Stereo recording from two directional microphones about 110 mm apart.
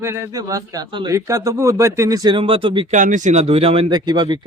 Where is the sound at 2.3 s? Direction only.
55° right (ahead or behind).